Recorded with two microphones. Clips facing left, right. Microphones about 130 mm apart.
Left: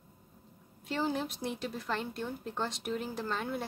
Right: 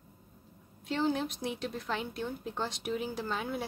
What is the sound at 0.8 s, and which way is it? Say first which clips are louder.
A woman's voice: right 2 dB; centre (ahead or behind).